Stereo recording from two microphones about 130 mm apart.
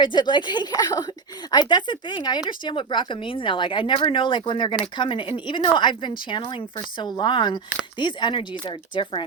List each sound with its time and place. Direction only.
0.0 s speech: 35° left (ahead or behind)